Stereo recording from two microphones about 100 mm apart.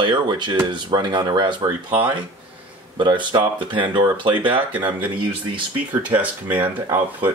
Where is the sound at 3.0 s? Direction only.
55° right (ahead or behind).